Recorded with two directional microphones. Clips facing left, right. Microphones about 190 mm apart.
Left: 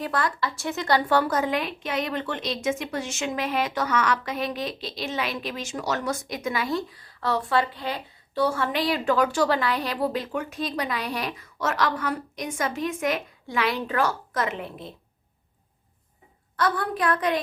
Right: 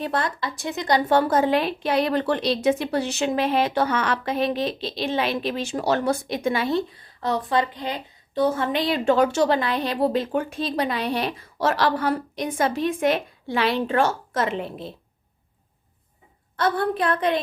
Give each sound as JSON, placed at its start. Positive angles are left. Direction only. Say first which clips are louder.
{"t": 0.0, "sound": "a woman's voice", "louder": "right 1 dB", "side_deg": -25}
{"t": 16.6, "sound": "a woman's voice", "louder": "right 3 dB", "side_deg": -25}